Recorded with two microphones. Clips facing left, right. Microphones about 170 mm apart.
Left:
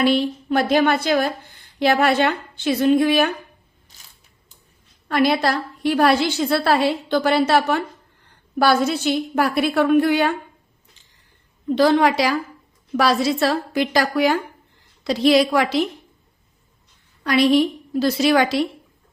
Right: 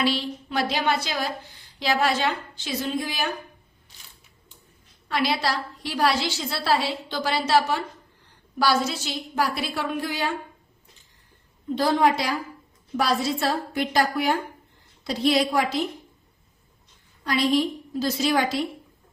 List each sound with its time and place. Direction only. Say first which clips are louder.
0.0 s a woman's voice: left 7 dB; 55° left (ahead or behind)
5.0 s a woman's voice: left 6 dB; 50° left (ahead or behind)
11.7 s a woman's voice: left 5 dB; 80° left
17.2 s a woman's voice: left 6 dB; 70° left (ahead or behind)